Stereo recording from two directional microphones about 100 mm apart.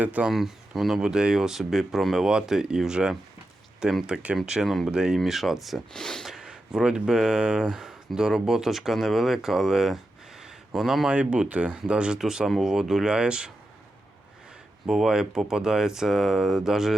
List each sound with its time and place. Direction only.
0.0 s speech: 15° right (ahead or behind)
0.3 s speech: 5° right (ahead or behind)
6.3 s speech: 10° right (ahead or behind)
14.8 s speech: 5° right (ahead or behind)